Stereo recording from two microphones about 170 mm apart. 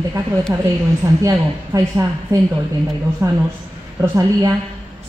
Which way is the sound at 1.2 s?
20° right (ahead or behind).